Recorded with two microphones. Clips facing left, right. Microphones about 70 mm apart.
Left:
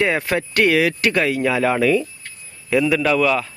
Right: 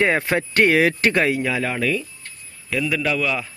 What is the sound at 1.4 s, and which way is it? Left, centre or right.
A man's voice, centre.